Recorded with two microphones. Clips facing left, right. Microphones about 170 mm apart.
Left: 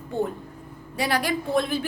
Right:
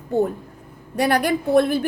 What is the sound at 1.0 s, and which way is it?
Speech, 50° right (ahead or behind).